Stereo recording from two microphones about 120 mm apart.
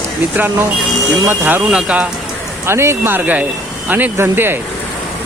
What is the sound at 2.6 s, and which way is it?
Speech, 20° right (ahead or behind).